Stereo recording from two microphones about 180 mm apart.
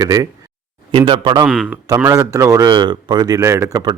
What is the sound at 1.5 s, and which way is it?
Speech, 5° left (ahead or behind).